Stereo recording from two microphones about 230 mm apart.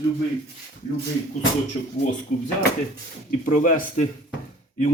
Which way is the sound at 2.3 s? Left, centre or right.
Left.